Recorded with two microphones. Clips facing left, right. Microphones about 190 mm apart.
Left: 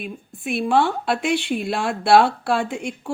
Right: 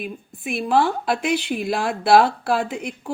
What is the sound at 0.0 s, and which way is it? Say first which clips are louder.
A woman's voice: even; centre (ahead or behind).